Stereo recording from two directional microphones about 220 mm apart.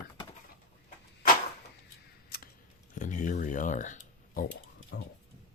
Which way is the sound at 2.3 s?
45° left (ahead or behind).